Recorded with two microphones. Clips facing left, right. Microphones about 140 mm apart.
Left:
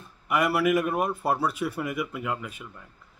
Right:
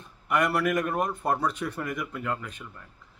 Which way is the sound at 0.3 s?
5° left (ahead or behind).